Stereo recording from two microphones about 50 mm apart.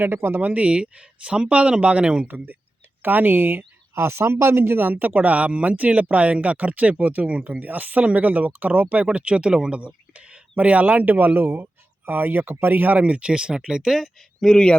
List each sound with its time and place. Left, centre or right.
0.2 s speech: right
0.4 s speech: right
2.2 s speech: right
3.9 s speech: right
13.1 s speech: right
14.4 s a man's voice: centre